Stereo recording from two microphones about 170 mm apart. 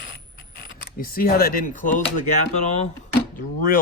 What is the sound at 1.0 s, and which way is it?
A man's voice, 60° left (ahead or behind).